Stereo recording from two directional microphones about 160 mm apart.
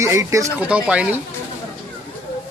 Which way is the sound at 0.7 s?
5° right (ahead or behind).